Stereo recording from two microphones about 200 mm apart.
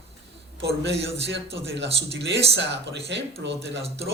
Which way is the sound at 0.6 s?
60° right (ahead or behind).